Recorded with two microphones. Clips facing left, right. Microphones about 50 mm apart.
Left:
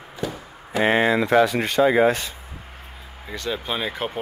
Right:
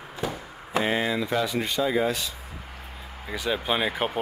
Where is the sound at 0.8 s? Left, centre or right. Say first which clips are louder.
Left 9 dB; left.